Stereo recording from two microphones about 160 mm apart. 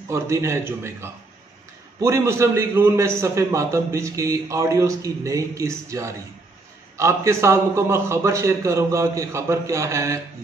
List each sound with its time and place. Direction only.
0.1 s a man's voice: 15° right (ahead or behind)